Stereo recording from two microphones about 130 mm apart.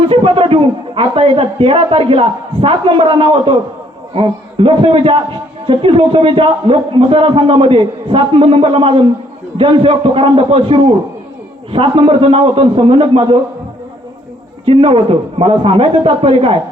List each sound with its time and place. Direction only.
0.1 s a man's voice: 45° right (ahead or behind)
14.6 s a man's voice: 45° right (ahead or behind)